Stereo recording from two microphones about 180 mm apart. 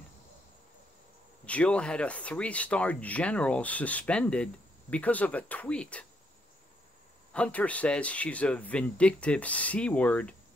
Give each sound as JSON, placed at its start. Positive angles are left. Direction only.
{"t": 1.4, "sound": "speech", "side_deg": 5}
{"t": 7.3, "sound": "speech", "side_deg": 5}